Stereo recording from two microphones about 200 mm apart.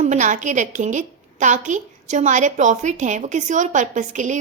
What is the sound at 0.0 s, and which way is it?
A woman's voice, 35° right (ahead or behind).